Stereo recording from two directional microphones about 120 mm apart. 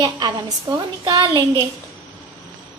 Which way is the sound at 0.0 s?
35° right (ahead or behind).